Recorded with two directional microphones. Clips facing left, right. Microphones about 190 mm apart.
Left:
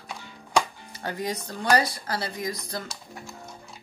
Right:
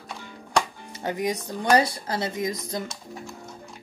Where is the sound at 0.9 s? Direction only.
20° right (ahead or behind).